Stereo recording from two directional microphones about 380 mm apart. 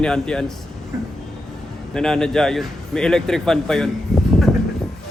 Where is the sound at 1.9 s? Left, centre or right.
Centre.